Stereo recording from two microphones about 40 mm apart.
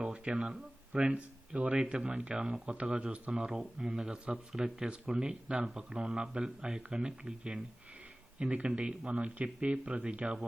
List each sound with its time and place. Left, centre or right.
0.0 s speech: right
3.8 s speech: centre